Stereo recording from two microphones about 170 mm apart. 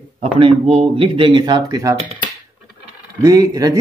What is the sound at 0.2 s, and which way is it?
Speech, 35° right (ahead or behind).